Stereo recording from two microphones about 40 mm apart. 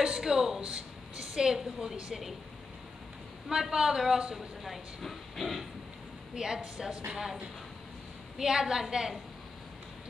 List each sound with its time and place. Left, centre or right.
0.0 s a woman's voice: centre
3.4 s a woman's voice: centre
4.6 s speech: centre
6.3 s a woman's voice: centre
8.4 s a woman's voice: centre